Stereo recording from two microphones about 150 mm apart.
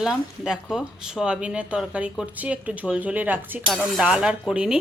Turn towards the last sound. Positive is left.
turn(degrees=-5)  # may be behind; listen again after turning